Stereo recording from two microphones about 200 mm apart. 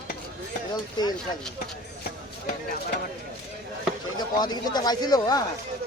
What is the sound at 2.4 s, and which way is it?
Speech, 50° left (ahead or behind).